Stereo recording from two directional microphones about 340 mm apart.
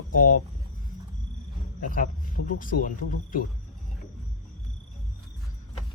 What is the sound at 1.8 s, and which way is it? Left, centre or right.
Speech, left.